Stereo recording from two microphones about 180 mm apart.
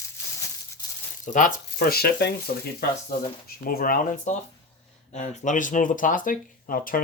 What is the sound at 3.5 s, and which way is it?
Speech, 55° left (ahead or behind).